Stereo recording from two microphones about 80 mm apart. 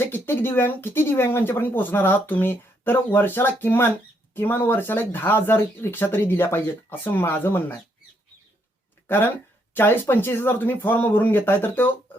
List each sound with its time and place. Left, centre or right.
0.0 s speech: left
9.0 s speech: left